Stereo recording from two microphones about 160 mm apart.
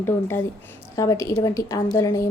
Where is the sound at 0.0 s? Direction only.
15° left (ahead or behind).